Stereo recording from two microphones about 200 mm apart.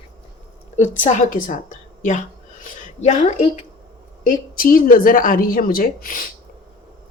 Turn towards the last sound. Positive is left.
turn(degrees=45)  # may be behind; listen again after turning